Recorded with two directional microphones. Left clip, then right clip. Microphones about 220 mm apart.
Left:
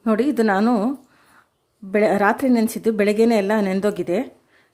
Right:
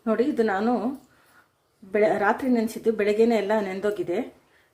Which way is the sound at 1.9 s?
35° left (ahead or behind).